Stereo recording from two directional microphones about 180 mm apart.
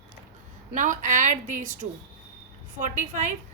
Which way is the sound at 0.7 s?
45° right (ahead or behind).